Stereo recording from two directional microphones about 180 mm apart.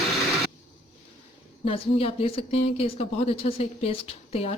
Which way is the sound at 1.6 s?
30° left (ahead or behind).